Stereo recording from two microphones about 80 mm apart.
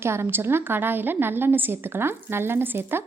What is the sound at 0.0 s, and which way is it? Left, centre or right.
A woman's voice, right.